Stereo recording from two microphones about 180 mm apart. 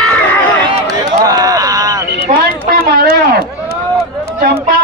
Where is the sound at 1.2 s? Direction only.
20° right (ahead or behind).